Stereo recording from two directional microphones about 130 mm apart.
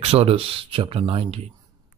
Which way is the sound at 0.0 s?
50° right (ahead or behind).